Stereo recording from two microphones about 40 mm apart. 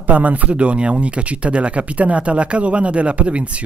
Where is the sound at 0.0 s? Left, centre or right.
Right.